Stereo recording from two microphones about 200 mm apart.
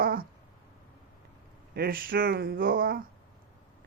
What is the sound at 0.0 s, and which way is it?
Cat, 45° right (ahead or behind).